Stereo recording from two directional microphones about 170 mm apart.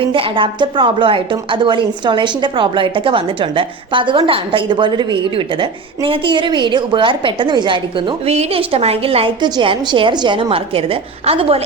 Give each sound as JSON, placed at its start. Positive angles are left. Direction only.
{"t": 0.0, "sound": "a woman's voice", "side_deg": -30}